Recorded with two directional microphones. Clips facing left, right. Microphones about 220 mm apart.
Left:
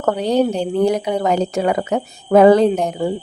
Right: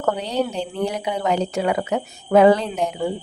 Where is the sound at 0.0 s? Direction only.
45° left (ahead or behind).